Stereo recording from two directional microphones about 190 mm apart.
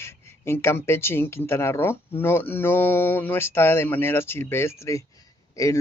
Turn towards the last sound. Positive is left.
turn(degrees=15)  # may be behind; listen again after turning